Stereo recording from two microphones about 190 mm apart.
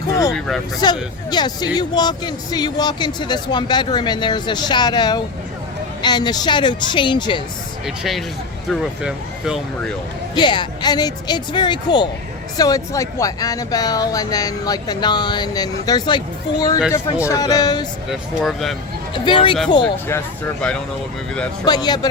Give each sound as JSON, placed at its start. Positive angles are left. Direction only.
{"t": 0.1, "sound": "a sound", "side_deg": 20}
{"t": 0.3, "sound": "speech", "side_deg": 5}
{"t": 1.3, "sound": "speech", "side_deg": 20}
{"t": 7.9, "sound": "speech", "side_deg": 0}
{"t": 10.3, "sound": "speech", "side_deg": 25}
{"t": 18.4, "sound": "speech", "side_deg": 0}
{"t": 19.1, "sound": "speech", "side_deg": 25}
{"t": 20.1, "sound": "speech", "side_deg": 10}
{"t": 21.6, "sound": "speech", "side_deg": 20}